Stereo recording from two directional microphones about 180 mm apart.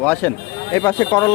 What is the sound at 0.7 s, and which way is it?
Speech, 15° left (ahead or behind).